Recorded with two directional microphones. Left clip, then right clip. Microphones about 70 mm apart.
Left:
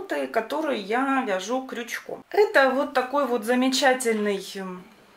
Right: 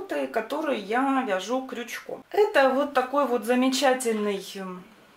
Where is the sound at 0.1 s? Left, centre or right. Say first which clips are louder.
Left 2 dB; left.